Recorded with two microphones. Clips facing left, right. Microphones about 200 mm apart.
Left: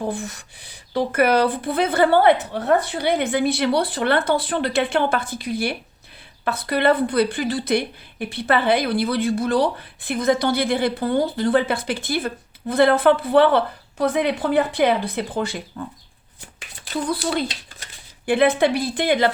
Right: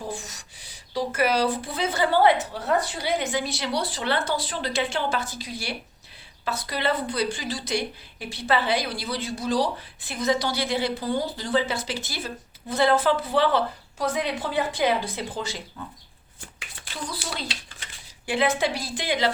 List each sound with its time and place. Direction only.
0.1 s a woman's voice: 55° left (ahead or behind)
17.1 s a woman's voice: 55° left (ahead or behind)